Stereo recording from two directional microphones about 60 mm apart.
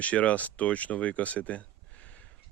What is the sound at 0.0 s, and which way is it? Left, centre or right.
Speech, left.